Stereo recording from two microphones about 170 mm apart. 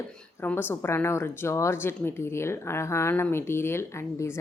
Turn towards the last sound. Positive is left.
turn(degrees=15)  # may be behind; listen again after turning